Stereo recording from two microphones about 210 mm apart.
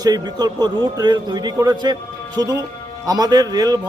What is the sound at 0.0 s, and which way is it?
A man's voice, 20° right (ahead or behind).